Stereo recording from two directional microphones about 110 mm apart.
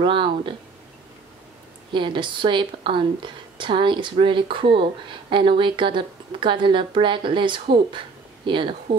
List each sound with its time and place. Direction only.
0.0 s speech: 50° right (ahead or behind)
1.9 s speech: 45° right (ahead or behind)